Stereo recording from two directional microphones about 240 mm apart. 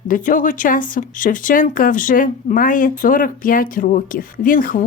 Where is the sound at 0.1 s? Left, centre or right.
Left.